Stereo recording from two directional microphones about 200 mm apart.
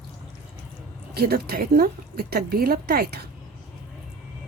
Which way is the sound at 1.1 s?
50° right (ahead or behind).